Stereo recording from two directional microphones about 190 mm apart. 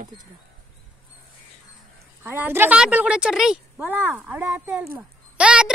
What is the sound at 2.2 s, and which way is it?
A woman's voice, 10° right (ahead or behind).